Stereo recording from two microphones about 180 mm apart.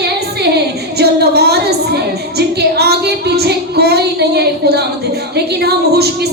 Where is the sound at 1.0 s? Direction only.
65° right (ahead or behind).